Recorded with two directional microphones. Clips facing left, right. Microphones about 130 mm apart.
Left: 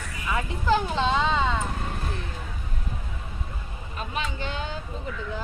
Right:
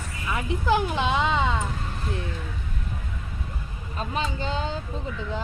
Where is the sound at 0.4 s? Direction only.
15° right (ahead or behind).